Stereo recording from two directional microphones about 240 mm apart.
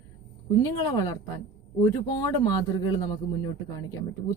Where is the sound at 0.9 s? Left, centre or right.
Centre.